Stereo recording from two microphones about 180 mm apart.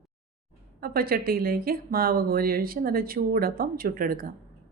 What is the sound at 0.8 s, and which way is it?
Speech, 55° right (ahead or behind).